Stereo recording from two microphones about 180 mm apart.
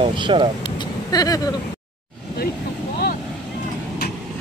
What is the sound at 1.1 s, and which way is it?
Speech, 20° left (ahead or behind).